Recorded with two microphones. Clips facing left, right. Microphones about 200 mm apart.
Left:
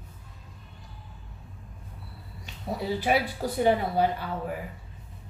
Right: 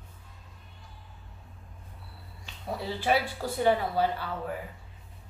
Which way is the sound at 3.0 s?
15° left (ahead or behind).